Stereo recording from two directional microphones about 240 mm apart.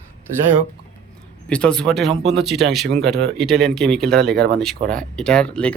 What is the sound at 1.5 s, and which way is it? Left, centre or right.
Speech, centre.